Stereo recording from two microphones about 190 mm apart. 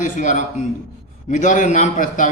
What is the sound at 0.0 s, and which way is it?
A man's voice, 40° left (ahead or behind).